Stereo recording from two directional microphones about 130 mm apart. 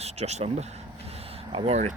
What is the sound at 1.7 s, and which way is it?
Speech, 65° right (ahead or behind).